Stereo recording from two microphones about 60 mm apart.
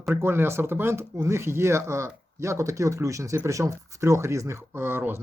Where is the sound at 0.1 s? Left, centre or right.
Right.